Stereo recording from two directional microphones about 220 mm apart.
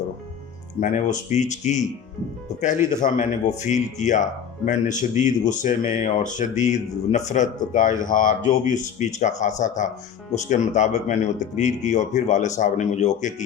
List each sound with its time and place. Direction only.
0.8 s speech: 35° left (ahead or behind)